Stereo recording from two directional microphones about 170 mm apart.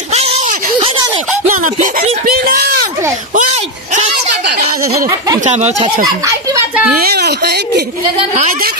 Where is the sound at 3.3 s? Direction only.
45° right (ahead or behind).